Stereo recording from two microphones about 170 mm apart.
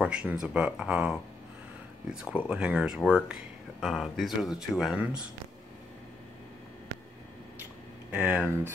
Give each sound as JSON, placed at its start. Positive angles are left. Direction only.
{"t": 0.0, "sound": "speech", "side_deg": -5}
{"t": 8.1, "sound": "speech", "side_deg": -10}